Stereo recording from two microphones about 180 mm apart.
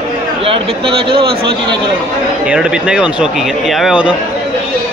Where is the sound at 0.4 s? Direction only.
30° right (ahead or behind).